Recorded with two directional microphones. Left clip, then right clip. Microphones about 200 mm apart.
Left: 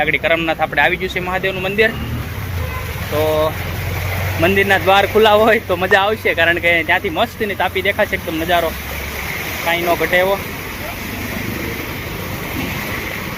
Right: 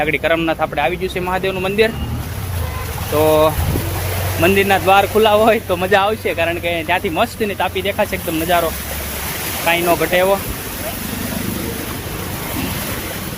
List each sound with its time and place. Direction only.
0.0 s speech: 30° right (ahead or behind)
3.2 s speech: 45° right (ahead or behind)
4.4 s speech: 25° right (ahead or behind)
6.8 s speech: 30° right (ahead or behind)